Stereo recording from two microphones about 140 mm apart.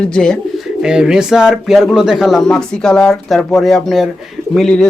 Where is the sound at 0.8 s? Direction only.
5° right (ahead or behind).